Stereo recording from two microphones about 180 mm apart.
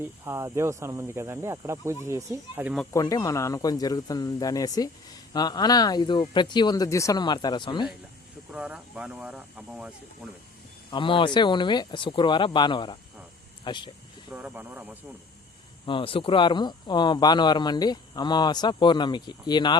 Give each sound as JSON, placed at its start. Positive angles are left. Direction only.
{"t": 0.0, "sound": "speech", "side_deg": -15}
{"t": 2.9, "sound": "speech", "side_deg": 20}
{"t": 8.5, "sound": "speech", "side_deg": -5}
{"t": 10.9, "sound": "speech", "side_deg": 30}
{"t": 14.3, "sound": "speech", "side_deg": -10}
{"t": 15.9, "sound": "speech", "side_deg": 30}